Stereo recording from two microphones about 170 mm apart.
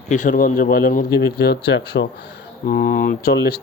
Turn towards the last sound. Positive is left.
turn(degrees=65)  # may be behind; listen again after turning